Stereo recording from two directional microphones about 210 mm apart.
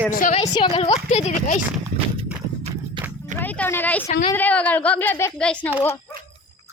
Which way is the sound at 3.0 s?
25° right (ahead or behind).